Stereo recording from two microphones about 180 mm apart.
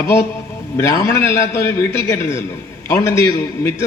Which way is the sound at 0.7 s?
15° left (ahead or behind).